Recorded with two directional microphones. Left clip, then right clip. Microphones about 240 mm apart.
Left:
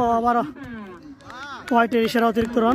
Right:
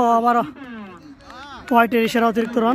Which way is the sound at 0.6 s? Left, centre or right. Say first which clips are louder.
Right 1 dB; right.